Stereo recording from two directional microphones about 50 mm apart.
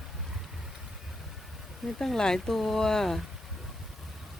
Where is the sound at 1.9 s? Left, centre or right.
Centre.